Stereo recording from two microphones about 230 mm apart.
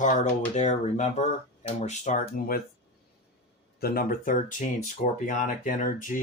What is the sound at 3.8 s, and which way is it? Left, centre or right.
Speech, left.